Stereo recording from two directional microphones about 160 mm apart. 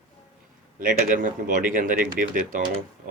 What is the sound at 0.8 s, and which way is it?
Speech, 60° right (ahead or behind).